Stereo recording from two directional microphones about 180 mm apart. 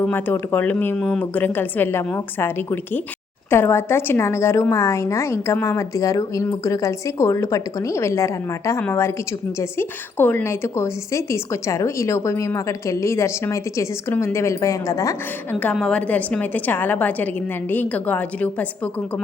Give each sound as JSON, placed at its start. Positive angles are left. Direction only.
{"t": 0.0, "sound": "a woman's voice", "side_deg": 10}
{"t": 15.6, "sound": "a woman's voice", "side_deg": 5}